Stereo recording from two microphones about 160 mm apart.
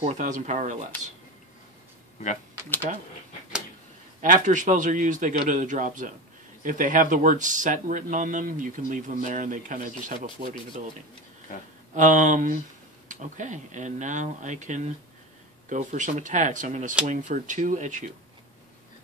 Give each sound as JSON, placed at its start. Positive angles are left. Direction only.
{"t": 0.0, "sound": "speech", "side_deg": -50}
{"t": 4.2, "sound": "speech", "side_deg": -55}
{"t": 11.9, "sound": "speech", "side_deg": -55}